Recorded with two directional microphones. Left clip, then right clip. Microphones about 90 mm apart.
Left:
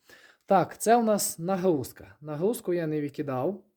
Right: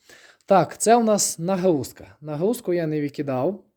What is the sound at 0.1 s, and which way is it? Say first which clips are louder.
Speech: right 5 dB; 25° right (ahead or behind).